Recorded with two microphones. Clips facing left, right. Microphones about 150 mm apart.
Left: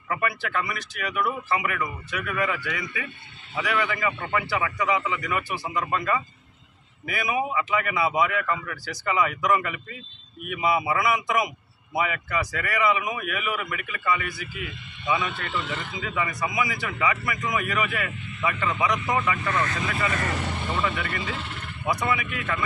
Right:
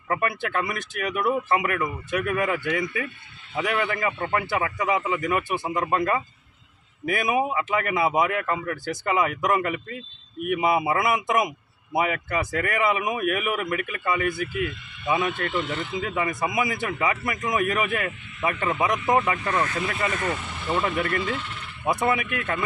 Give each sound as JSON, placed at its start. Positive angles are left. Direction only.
{"t": 0.1, "sound": "a man's voice", "side_deg": -50}
{"t": 7.1, "sound": "a man's voice", "side_deg": -50}
{"t": 20.8, "sound": "a man's voice", "side_deg": -45}